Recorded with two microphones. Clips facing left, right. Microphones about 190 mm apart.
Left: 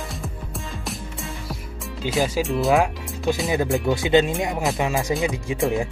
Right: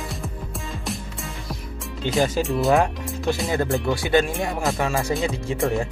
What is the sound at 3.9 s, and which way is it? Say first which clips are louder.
Speech: left 3 dB; 20° left (ahead or behind).